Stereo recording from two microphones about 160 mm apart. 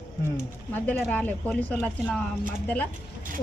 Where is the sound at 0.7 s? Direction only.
10° left (ahead or behind).